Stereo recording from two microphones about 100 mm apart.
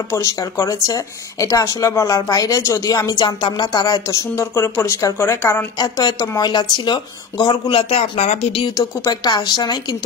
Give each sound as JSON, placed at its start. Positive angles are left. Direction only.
{"t": 0.1, "sound": "speech", "side_deg": 30}
{"t": 5.8, "sound": "speech", "side_deg": 40}
{"t": 8.7, "sound": "speech", "side_deg": 40}